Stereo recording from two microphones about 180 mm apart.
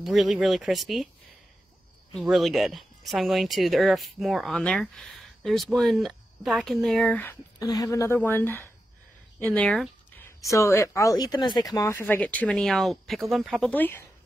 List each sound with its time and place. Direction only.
0.0 s speech: centre (ahead or behind)
2.1 s speech: centre (ahead or behind)
10.4 s speech: 15° left (ahead or behind)